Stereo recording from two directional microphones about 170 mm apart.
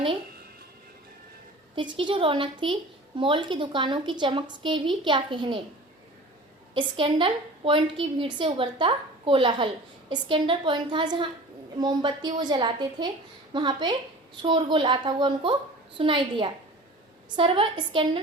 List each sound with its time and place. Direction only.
1.7 s a woman's voice: 30° right (ahead or behind)
6.7 s a woman's voice: 30° right (ahead or behind)